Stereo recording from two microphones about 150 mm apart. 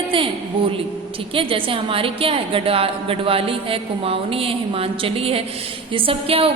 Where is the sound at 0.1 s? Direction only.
35° right (ahead or behind).